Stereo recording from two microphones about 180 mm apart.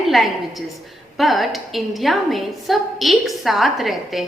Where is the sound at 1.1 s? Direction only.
Centre (ahead or behind).